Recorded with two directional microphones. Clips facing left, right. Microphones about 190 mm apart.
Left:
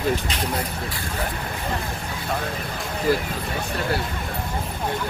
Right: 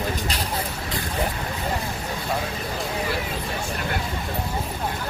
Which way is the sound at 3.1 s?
45° left (ahead or behind).